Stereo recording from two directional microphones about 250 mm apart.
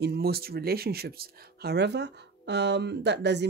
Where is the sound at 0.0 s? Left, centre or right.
Right.